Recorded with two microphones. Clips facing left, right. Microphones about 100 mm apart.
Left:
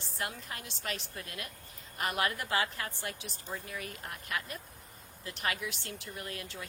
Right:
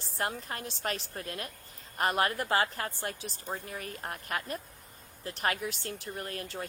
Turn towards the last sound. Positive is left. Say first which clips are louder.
# right 4 dB
turn(degrees=-40)  # may be behind; listen again after turning